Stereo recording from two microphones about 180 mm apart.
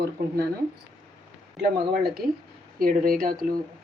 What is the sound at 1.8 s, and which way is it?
Speech, 60° right (ahead or behind).